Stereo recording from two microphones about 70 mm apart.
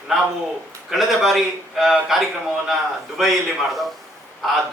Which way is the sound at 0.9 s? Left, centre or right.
Centre.